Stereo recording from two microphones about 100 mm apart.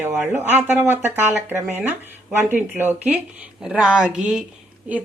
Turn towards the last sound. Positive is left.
turn(degrees=-15)  # may be behind; listen again after turning